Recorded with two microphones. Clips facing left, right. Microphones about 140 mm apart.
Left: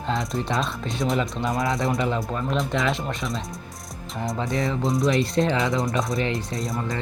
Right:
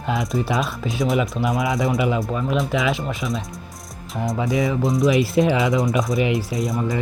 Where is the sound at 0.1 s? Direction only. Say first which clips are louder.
Right 4 dB; centre (ahead or behind).